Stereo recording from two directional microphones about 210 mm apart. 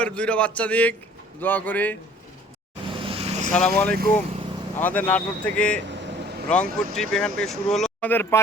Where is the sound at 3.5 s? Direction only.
5° left (ahead or behind).